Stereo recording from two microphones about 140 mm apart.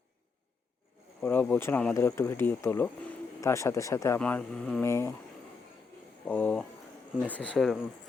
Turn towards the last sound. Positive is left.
turn(degrees=0)  # may be behind; listen again after turning